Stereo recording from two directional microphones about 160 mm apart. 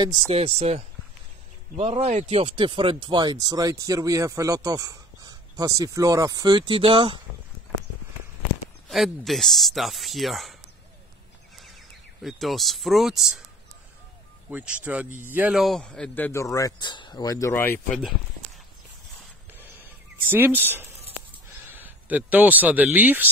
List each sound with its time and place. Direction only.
0.3 s speech: 40° right (ahead or behind)
8.8 s speech: centre (ahead or behind)
12.2 s speech: centre (ahead or behind)
14.5 s speech: 10° right (ahead or behind); by 17.7 s 15° left (ahead or behind)
19.5 s a sound: 10° right (ahead or behind)
21.7 s speech: 10° right (ahead or behind)